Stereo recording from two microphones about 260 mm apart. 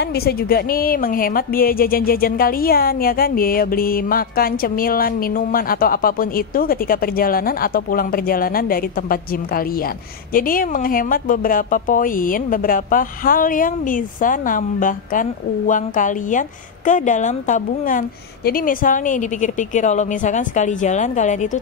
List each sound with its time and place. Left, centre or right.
0.0 s a woman's voice: left